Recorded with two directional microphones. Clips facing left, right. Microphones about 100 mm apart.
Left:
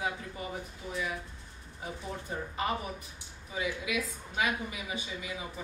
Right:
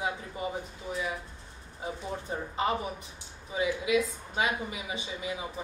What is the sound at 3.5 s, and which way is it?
A woman's voice, 25° right (ahead or behind).